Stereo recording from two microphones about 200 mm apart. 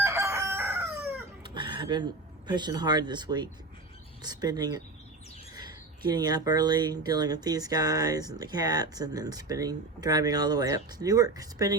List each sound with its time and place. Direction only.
0.0 s chicken: 15° right (ahead or behind)
1.5 s a sound: 25° right (ahead or behind)
2.5 s speech: 20° right (ahead or behind)